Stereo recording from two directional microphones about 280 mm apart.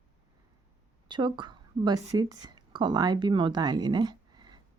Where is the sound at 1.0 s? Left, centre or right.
Centre.